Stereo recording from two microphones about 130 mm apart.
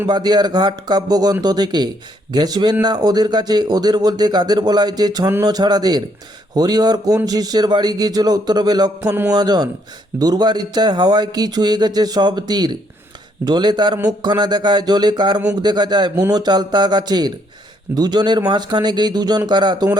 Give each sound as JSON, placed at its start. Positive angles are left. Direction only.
{"t": 0.1, "sound": "speech", "side_deg": -30}